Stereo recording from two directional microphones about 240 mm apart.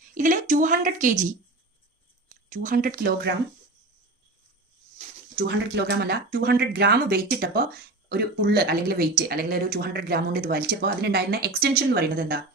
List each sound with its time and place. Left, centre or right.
0.1 s speech: right
2.5 s speech: right
4.9 s speech: right